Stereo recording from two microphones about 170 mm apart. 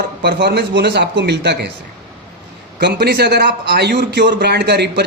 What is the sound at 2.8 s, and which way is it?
A man's voice, 70° right (ahead or behind).